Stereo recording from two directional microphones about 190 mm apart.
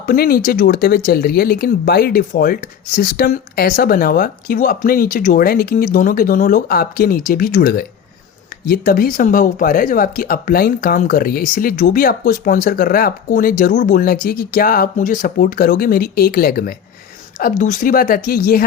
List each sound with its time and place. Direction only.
0.0 s speech: 50° left (ahead or behind)